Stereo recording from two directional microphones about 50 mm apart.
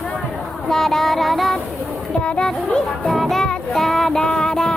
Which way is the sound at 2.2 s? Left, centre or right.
Left.